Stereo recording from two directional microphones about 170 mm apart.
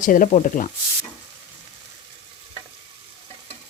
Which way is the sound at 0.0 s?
50° left (ahead or behind).